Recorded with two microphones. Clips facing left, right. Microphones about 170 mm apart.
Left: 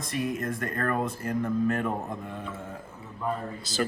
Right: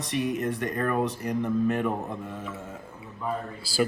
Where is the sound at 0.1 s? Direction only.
15° right (ahead or behind).